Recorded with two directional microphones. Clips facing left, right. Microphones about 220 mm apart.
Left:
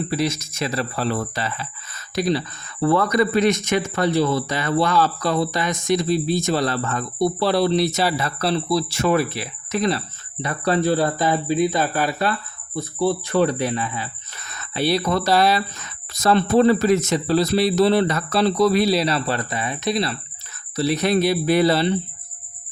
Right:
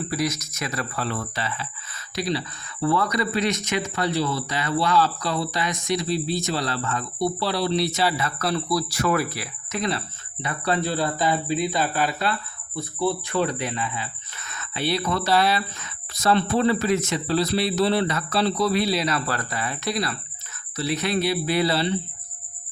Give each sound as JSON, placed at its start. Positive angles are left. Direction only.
{"t": 0.1, "sound": "speech", "side_deg": 30}
{"t": 10.4, "sound": "speech", "side_deg": 45}
{"t": 20.7, "sound": "speech", "side_deg": 40}